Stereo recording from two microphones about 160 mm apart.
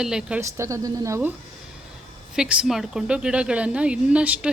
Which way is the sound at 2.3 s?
5° right (ahead or behind).